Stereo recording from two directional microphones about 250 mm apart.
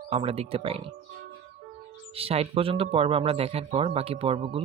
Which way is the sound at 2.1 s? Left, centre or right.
Right.